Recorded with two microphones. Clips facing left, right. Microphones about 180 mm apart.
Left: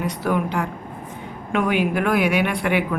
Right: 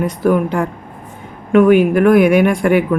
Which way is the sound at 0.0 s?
50° right (ahead or behind).